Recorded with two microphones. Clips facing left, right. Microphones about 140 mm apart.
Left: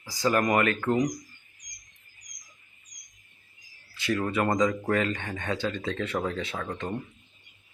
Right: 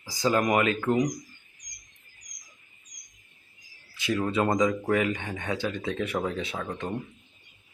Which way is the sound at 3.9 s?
15° right (ahead or behind).